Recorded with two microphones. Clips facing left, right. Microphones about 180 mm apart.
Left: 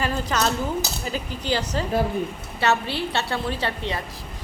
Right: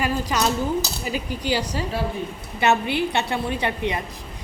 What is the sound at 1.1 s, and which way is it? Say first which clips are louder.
A woman's voice: right 2 dB; 10° right (ahead or behind).